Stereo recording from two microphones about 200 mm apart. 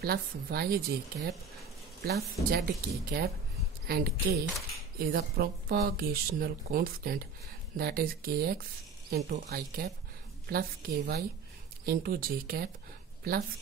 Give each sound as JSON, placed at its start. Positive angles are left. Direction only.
{"t": 0.0, "sound": "speech", "side_deg": -50}